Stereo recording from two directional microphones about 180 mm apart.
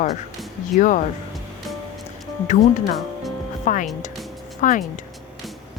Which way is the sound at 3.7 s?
45° left (ahead or behind).